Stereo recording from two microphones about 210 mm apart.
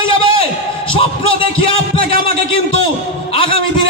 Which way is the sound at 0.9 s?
25° left (ahead or behind).